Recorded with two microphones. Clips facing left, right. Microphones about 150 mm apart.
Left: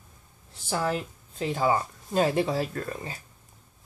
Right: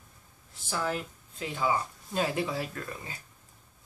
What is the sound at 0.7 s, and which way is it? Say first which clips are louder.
Speech: left 4 dB; 30° left (ahead or behind).